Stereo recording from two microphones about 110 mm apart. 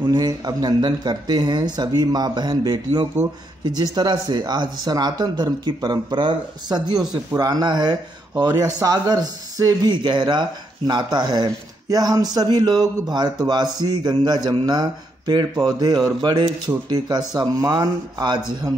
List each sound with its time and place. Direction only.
0.0 s speech: 40° right (ahead or behind)